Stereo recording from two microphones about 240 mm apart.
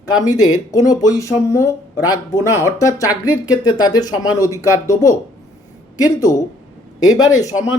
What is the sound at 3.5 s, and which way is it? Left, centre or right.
Speech, centre.